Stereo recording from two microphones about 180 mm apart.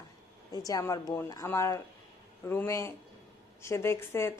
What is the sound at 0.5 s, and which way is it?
A woman's voice, 20° left (ahead or behind).